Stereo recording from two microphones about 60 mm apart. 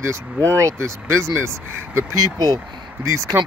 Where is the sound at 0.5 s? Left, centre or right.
Right.